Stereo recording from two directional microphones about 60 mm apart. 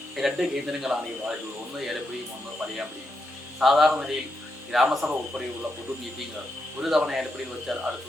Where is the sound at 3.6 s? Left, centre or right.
Centre.